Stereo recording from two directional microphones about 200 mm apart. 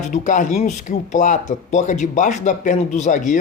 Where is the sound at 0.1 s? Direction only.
40° left (ahead or behind).